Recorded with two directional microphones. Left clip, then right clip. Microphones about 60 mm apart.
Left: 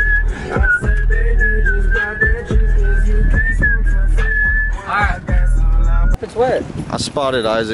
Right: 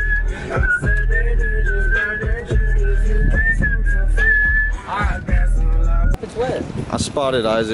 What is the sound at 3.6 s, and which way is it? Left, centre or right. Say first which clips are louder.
Whistling: left 6 dB; centre.